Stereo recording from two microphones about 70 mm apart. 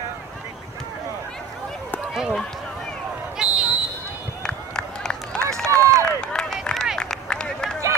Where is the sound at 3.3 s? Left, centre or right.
Centre.